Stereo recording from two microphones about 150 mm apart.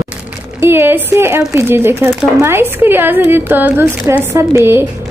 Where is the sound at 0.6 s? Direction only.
15° right (ahead or behind).